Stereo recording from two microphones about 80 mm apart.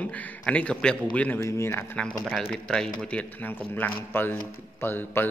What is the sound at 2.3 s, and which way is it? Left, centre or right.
A man's voice, centre.